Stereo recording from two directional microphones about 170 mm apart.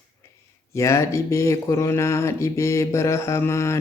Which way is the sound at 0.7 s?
15° left (ahead or behind).